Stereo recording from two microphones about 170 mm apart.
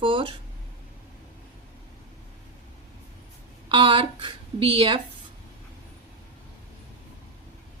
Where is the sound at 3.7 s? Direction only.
30° right (ahead or behind).